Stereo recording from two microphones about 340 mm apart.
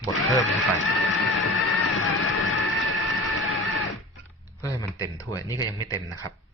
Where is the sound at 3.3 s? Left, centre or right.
Left.